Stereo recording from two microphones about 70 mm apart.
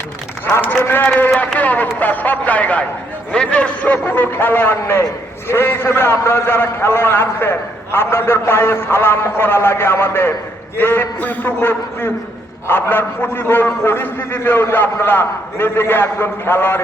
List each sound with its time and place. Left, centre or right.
0.7 s a man's voice: left